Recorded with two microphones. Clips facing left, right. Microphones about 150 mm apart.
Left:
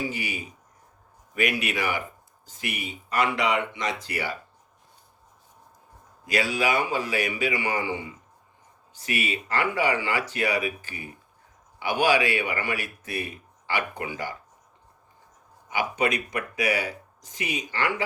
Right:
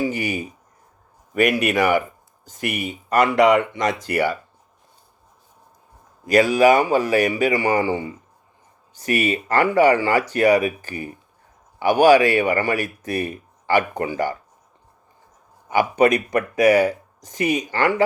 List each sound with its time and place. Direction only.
0.1 s speech: 45° right (ahead or behind)
6.2 s speech: 45° right (ahead or behind)
15.7 s speech: 45° right (ahead or behind)